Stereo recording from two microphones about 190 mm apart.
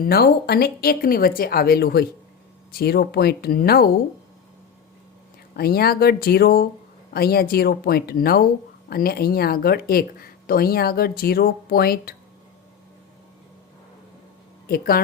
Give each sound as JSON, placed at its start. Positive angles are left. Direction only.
{"t": 0.0, "sound": "speech", "side_deg": 55}
{"t": 5.5, "sound": "speech", "side_deg": 55}
{"t": 14.7, "sound": "speech", "side_deg": 50}